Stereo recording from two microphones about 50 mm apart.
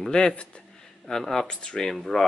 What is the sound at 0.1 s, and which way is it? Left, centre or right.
Speech, centre.